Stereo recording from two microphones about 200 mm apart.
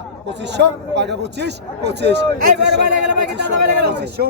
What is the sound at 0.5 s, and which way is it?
Speech, 60° right (ahead or behind).